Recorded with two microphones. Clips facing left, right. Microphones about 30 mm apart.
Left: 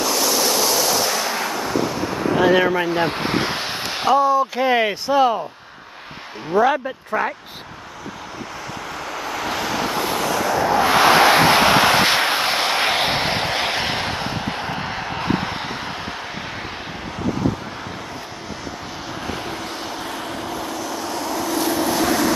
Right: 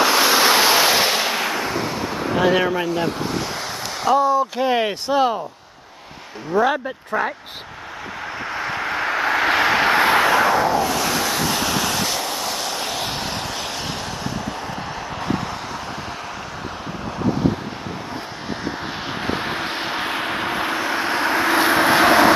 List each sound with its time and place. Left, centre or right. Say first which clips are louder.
0.0 s waves: right 4 dB; right; by 2.7 s centre
2.9 s speech: left 2 dB; left
4.2 s speech: left 1 dB; centre
6.5 s speech: left 1 dB; centre
8.5 s vehicle: right 9 dB; right
10.8 s vehicle: left 7 dB; left
19.2 s vehicle: right 5 dB; right